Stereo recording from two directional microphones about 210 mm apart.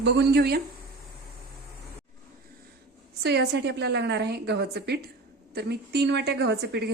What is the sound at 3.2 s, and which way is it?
A woman's voice, 50° right (ahead or behind).